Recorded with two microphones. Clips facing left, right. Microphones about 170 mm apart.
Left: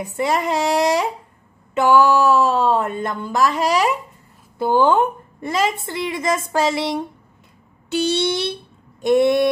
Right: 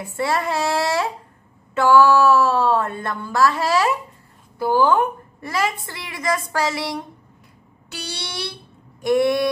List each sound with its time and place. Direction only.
0.0 s a woman's voice: 15° left (ahead or behind)